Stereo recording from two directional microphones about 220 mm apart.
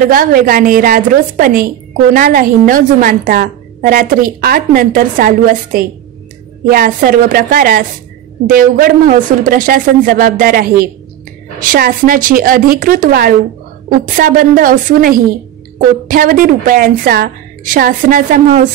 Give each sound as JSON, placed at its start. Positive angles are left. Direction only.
{"t": 0.1, "sound": "a woman's voice", "side_deg": -40}